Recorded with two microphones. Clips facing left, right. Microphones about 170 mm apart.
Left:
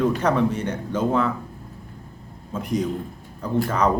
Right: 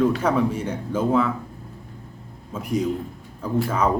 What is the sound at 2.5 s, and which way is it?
Speech, 10° right (ahead or behind).